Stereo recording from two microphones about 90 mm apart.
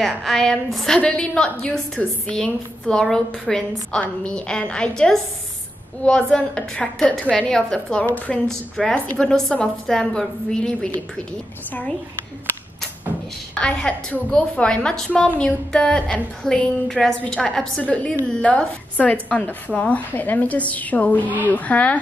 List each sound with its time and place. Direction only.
0.0 s a woman's voice: centre (ahead or behind)
13.6 s a woman's voice: 10° left (ahead or behind)